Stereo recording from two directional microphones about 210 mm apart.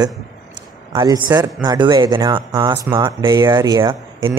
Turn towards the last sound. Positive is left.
turn(degrees=-15)  # may be behind; listen again after turning